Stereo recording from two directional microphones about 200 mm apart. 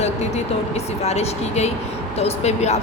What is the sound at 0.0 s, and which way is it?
Speech, 35° left (ahead or behind).